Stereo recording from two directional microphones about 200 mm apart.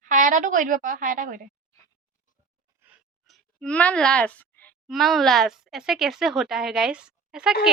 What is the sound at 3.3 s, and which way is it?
A woman's voice, 5° left (ahead or behind).